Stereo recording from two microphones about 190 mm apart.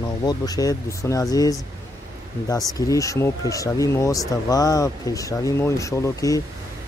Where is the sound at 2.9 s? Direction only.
15° left (ahead or behind).